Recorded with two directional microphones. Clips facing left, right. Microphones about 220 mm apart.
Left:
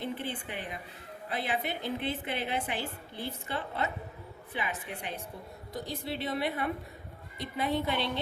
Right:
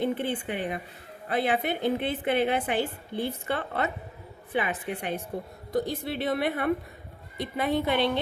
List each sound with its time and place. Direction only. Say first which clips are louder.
0.0 s a woman's voice: right 8 dB; 60° right (ahead or behind)